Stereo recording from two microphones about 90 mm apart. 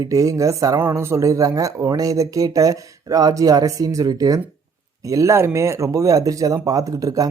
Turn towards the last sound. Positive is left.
turn(degrees=-40)  # may be behind; listen again after turning